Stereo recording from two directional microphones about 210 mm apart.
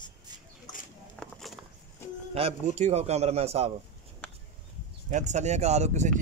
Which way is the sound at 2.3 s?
30° right (ahead or behind).